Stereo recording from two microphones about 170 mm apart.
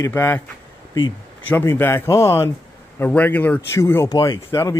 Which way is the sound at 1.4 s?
10° left (ahead or behind).